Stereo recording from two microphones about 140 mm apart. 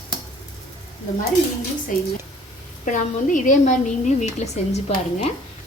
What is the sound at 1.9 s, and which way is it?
A woman's voice, 75° left (ahead or behind).